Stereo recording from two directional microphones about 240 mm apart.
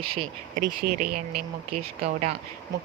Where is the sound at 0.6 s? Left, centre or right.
Right.